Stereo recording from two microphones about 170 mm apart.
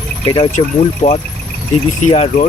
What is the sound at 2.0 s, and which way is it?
Speech, 45° left (ahead or behind).